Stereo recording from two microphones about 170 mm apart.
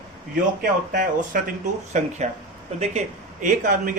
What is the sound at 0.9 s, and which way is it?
Speech, 50° right (ahead or behind).